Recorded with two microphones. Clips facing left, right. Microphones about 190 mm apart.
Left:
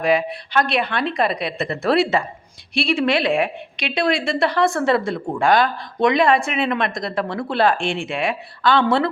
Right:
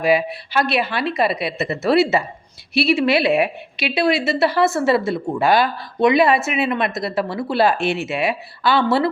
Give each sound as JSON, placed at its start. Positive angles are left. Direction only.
{"t": 0.0, "sound": "a woman's voice", "side_deg": -5}